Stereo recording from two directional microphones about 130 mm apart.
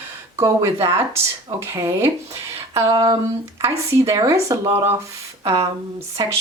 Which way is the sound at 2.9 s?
35° right (ahead or behind).